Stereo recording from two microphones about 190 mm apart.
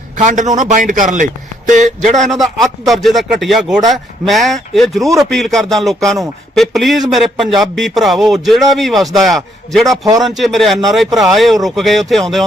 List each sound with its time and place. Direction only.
0.2 s a man's voice: 40° right (ahead or behind)
2.3 s speech: centre (ahead or behind)